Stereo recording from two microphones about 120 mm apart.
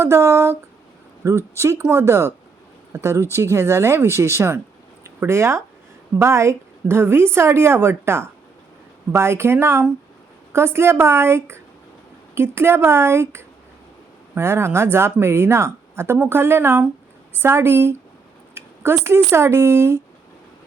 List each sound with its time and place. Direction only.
0.0 s a woman's voice: 25° right (ahead or behind)